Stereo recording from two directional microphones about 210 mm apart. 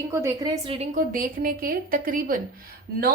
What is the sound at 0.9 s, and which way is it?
A woman's voice, 40° right (ahead or behind).